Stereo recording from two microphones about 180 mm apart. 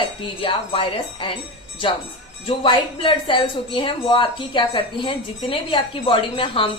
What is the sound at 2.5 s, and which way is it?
Speech, 30° left (ahead or behind).